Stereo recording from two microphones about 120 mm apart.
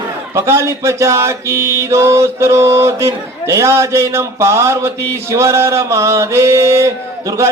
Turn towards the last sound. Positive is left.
turn(degrees=-25)  # may be behind; listen again after turning